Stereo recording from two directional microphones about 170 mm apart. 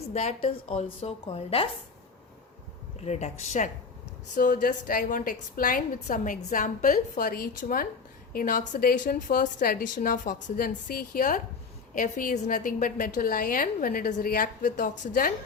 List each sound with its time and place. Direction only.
0.0 s a woman's voice: 40° left (ahead or behind)
3.0 s a woman's voice: 40° left (ahead or behind)